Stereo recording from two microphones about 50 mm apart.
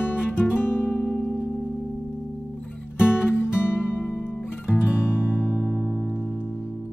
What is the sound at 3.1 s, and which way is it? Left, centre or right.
Music, left.